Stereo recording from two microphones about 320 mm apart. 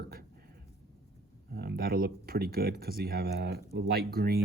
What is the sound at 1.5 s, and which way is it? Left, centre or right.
Speech, right.